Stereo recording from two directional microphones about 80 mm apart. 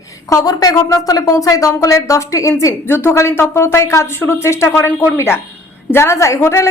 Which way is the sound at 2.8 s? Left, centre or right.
Left.